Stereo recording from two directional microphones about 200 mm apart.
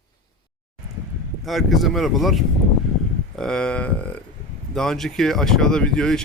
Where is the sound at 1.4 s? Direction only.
Centre (ahead or behind).